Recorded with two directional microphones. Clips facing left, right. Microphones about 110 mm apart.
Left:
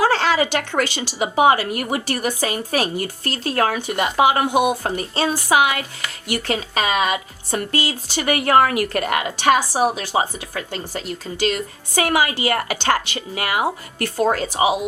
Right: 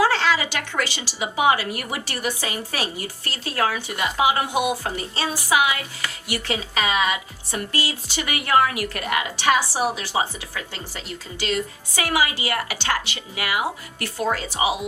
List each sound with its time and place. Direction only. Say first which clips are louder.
0.0 s a woman's voice: left 3 dB; 50° left (ahead or behind)